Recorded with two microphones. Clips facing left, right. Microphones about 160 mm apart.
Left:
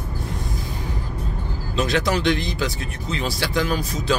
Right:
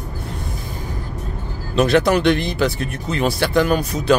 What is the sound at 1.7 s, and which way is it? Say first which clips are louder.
Speech: right 7 dB; 60° right (ahead or behind).